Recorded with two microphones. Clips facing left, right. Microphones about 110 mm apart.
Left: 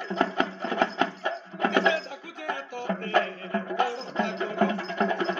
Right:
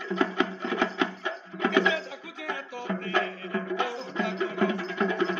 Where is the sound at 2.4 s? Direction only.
45° left (ahead or behind).